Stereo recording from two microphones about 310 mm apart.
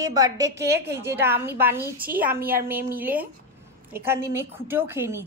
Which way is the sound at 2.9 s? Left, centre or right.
Centre.